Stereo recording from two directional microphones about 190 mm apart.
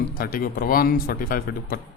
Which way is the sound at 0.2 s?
50° left (ahead or behind).